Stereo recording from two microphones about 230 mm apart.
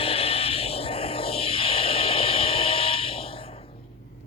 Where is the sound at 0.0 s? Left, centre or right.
Left.